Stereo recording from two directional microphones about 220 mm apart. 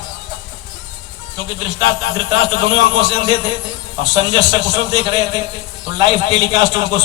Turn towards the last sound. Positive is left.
turn(degrees=-20)  # may be behind; listen again after turning